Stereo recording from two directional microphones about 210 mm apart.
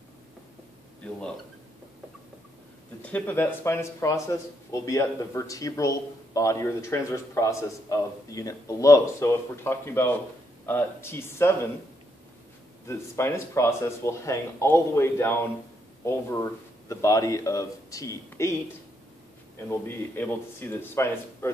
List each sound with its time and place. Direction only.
3.0 s speech: 5° left (ahead or behind)
12.8 s speech: 10° left (ahead or behind)
19.9 s speech: 10° left (ahead or behind)